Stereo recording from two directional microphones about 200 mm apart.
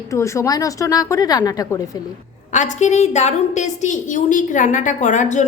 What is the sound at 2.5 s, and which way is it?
A woman's voice, 40° left (ahead or behind).